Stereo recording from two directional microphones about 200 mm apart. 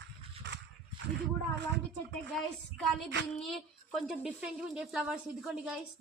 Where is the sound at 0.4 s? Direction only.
60° right (ahead or behind).